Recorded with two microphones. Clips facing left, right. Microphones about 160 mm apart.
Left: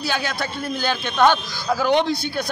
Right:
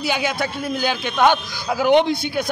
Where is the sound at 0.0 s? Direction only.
15° right (ahead or behind).